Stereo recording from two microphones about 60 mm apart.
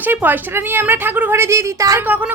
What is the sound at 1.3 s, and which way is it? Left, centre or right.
Speech, right.